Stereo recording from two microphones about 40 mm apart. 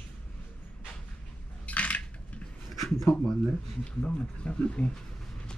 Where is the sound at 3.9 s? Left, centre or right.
Left.